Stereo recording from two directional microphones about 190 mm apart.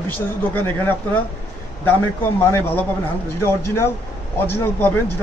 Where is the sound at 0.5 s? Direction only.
10° left (ahead or behind).